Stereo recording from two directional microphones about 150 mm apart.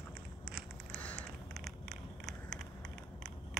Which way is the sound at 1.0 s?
5° left (ahead or behind).